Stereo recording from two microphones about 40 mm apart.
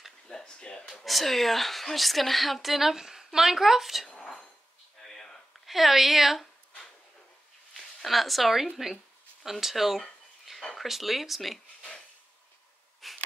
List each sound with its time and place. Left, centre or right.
0.3 s a sound: centre
1.0 s a woman's voice: centre
4.1 s whispering: centre
5.0 s a sound: centre
5.7 s a woman's voice: centre
7.7 s a woman's voice: centre
10.6 s a sound: centre
10.9 s a woman's voice: centre
13.0 s breathing: centre